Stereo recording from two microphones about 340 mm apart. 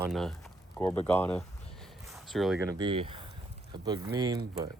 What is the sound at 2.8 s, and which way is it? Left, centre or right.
Speech, centre.